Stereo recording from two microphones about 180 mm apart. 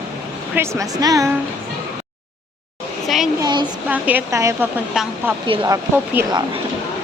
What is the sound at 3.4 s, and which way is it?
Speech, 25° right (ahead or behind).